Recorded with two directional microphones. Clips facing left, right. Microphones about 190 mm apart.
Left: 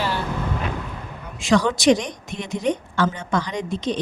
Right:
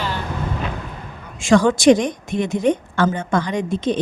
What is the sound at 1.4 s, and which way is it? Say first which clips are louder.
A woman's voice: right 4 dB; 50° right (ahead or behind).